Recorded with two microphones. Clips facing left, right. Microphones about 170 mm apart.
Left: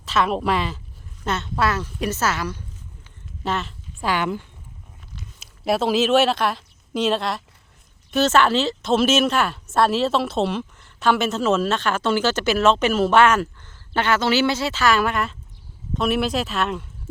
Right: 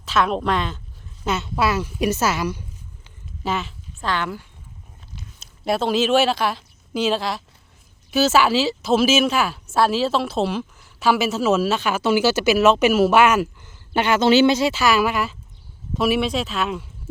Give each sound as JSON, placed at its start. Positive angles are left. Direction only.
{"t": 0.0, "sound": "a woman's voice", "side_deg": 0}
{"t": 3.4, "sound": "speech", "side_deg": 0}
{"t": 4.0, "sound": "speech", "side_deg": 15}
{"t": 5.4, "sound": "speech", "side_deg": 0}